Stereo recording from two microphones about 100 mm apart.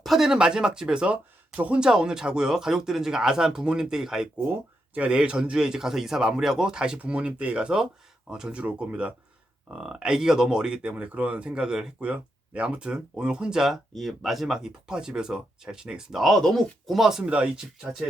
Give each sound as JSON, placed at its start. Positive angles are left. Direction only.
{"t": 0.0, "sound": "speech", "side_deg": 0}